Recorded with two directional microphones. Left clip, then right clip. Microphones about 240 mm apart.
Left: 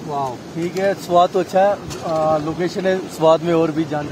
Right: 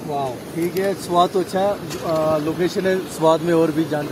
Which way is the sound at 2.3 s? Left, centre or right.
Left.